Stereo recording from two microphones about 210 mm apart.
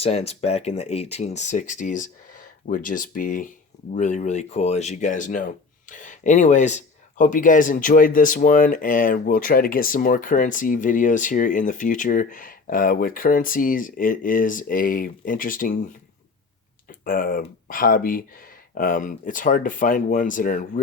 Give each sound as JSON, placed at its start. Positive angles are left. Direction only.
{"t": 0.0, "sound": "speech", "side_deg": 30}
{"t": 17.0, "sound": "speech", "side_deg": 45}